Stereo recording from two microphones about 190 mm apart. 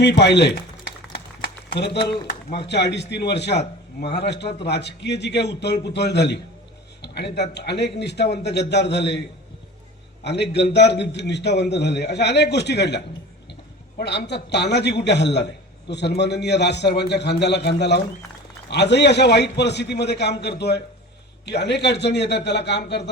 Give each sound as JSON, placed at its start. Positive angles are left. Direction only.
{"t": 0.0, "sound": "a man's voice", "side_deg": 65}
{"t": 1.8, "sound": "a man's voice", "side_deg": 60}
{"t": 7.0, "sound": "a sound", "side_deg": 60}
{"t": 7.5, "sound": "a man's voice", "side_deg": 60}
{"t": 10.2, "sound": "a man's voice", "side_deg": 65}